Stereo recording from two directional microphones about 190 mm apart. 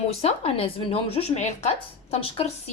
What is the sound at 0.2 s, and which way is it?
A woman's voice, 30° left (ahead or behind).